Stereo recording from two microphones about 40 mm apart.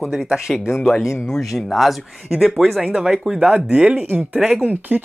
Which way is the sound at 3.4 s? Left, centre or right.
Right.